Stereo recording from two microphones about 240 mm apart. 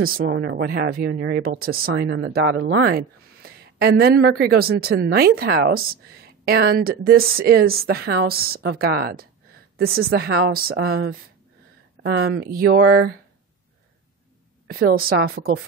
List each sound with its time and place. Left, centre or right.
0.3 s speech: right
12.0 s speech: right
14.7 s speech: right